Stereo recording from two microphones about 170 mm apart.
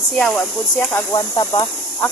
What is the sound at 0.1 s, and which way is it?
Speech, 5° left (ahead or behind).